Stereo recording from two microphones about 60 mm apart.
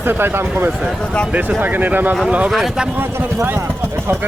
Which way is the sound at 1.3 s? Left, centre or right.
Right.